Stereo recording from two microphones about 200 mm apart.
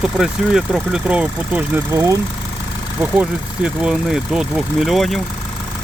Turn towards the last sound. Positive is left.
turn(degrees=0)  # may be behind; listen again after turning